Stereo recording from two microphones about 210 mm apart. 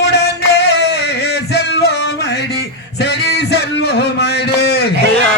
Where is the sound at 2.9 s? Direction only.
50° left (ahead or behind).